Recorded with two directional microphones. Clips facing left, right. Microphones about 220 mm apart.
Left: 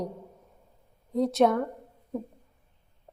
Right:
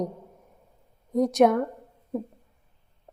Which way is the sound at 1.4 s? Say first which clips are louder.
Right 3 dB; 10° right (ahead or behind).